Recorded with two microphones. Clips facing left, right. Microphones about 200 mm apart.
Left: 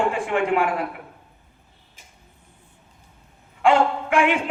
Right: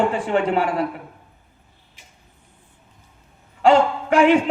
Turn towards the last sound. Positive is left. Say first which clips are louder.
# right 5 dB
turn(degrees=-35)  # may be behind; listen again after turning